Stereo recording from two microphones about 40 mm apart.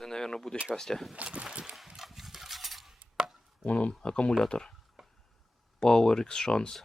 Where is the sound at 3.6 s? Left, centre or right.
Left.